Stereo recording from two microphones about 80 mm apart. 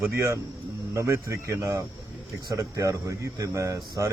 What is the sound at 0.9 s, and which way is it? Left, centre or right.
Speech, right.